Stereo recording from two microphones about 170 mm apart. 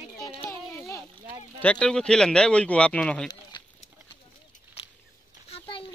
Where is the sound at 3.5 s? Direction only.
25° left (ahead or behind).